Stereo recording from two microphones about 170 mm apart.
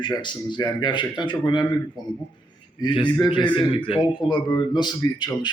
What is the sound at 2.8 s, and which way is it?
Speech, 30° left (ahead or behind).